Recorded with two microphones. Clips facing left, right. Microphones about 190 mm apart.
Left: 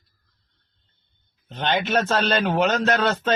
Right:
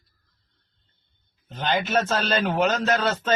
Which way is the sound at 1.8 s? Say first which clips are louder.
Left 1 dB; 5° right (ahead or behind).